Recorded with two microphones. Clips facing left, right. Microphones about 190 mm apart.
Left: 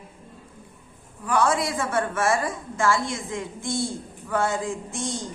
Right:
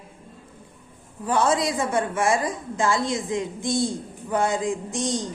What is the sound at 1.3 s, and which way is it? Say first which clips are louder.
A woman's voice: right 1 dB; 20° right (ahead or behind).